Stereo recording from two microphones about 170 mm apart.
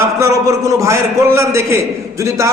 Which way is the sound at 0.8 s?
15° right (ahead or behind).